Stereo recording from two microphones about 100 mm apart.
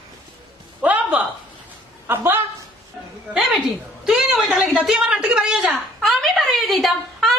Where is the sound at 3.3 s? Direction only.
Centre (ahead or behind).